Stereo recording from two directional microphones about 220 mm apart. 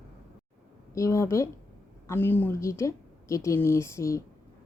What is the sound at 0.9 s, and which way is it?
A woman's voice, 15° left (ahead or behind).